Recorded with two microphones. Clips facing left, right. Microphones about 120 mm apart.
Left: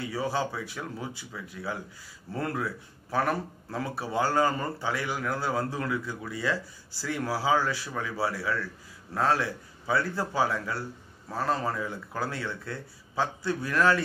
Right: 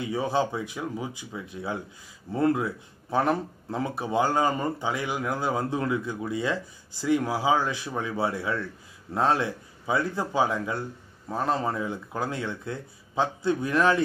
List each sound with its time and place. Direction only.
0.0 s speech: 20° right (ahead or behind)